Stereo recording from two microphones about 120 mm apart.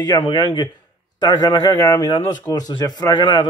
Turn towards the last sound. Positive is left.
turn(degrees=40)  # may be behind; listen again after turning